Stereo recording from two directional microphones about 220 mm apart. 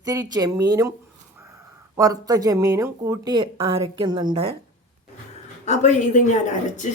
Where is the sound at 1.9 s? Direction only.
15° right (ahead or behind).